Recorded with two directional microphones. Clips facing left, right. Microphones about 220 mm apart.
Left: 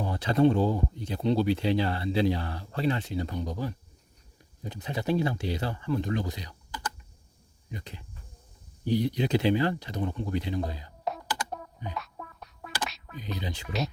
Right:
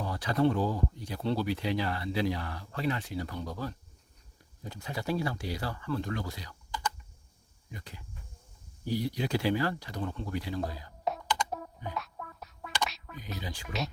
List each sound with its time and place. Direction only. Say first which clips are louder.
0.0 s speech: left 5 dB; 25° left (ahead or behind)
7.7 s speech: left 5 dB; 20° left (ahead or behind)
11.0 s music: right 1 dB; centre (ahead or behind)
13.4 s speech: left 4 dB; 20° left (ahead or behind)